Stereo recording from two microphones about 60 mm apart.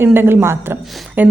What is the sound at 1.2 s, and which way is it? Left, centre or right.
Speech, right.